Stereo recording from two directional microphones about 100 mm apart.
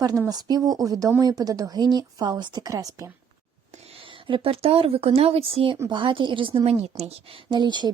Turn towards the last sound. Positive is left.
turn(degrees=-50)  # may be behind; listen again after turning